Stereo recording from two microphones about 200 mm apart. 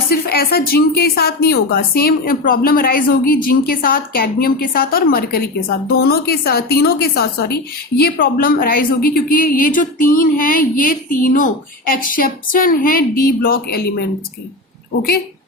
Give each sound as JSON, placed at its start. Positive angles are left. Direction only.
{"t": 0.1, "sound": "a woman's voice", "side_deg": 50}